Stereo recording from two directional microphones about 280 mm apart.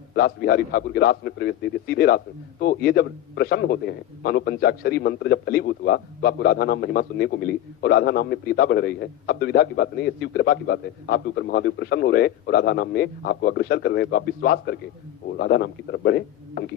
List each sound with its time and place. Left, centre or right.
0.1 s a man's voice: left